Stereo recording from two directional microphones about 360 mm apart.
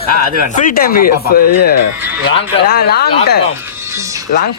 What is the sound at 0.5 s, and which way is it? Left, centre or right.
Speech, left.